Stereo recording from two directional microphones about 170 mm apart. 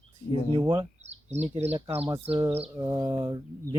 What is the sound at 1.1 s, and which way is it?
Speech, 40° right (ahead or behind).